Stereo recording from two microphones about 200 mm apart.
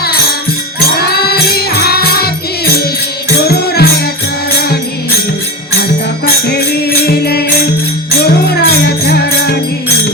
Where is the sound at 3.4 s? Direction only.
50° left (ahead or behind).